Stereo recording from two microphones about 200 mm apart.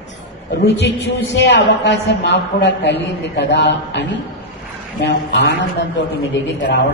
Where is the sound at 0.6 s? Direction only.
60° left (ahead or behind).